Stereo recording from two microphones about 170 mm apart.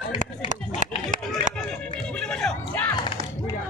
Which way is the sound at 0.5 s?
50° right (ahead or behind).